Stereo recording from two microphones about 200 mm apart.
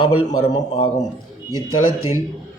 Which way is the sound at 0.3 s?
20° left (ahead or behind).